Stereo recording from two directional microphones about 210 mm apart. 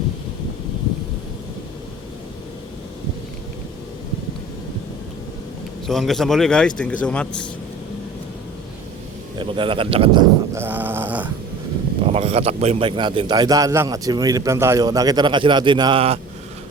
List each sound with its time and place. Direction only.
5.9 s a man's voice: centre (ahead or behind)
9.4 s a man's voice: 25° right (ahead or behind)
10.5 s a sound: 10° right (ahead or behind)
12.1 s a man's voice: 30° right (ahead or behind)